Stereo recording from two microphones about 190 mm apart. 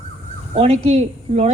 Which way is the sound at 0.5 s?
35° right (ahead or behind).